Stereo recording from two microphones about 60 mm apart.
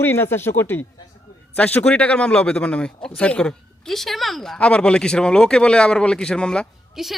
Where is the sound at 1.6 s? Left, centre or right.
Left; by 4.6 s centre.